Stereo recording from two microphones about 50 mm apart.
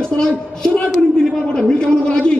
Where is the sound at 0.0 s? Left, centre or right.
Centre.